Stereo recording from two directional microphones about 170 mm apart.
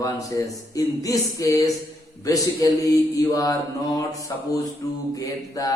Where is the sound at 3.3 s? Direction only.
20° left (ahead or behind).